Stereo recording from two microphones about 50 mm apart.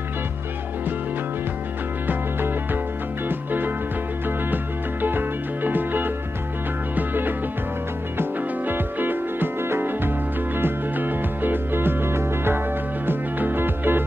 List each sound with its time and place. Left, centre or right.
2.0 s music: right
5.0 s music: right